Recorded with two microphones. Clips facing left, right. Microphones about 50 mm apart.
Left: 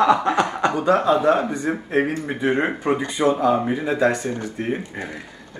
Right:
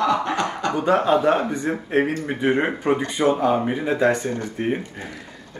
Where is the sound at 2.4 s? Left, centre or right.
Centre.